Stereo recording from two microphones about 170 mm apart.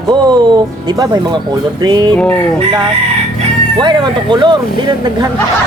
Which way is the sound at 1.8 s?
25° right (ahead or behind).